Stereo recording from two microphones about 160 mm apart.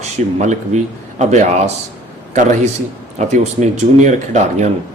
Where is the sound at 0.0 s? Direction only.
45° right (ahead or behind).